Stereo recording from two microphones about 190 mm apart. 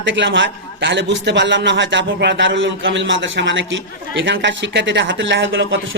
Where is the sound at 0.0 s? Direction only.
75° right (ahead or behind).